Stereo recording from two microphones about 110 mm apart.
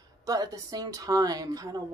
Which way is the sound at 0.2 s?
35° right (ahead or behind).